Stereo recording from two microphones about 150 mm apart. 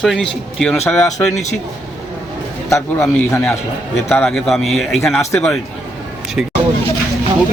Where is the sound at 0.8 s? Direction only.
20° left (ahead or behind).